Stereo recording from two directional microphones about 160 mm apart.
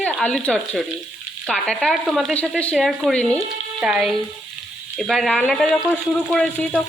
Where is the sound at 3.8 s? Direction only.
5° right (ahead or behind).